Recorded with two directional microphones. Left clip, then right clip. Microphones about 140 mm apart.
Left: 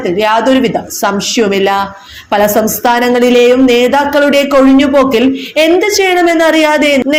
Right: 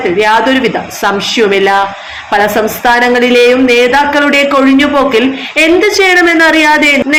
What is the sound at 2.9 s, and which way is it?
Speech, 40° left (ahead or behind).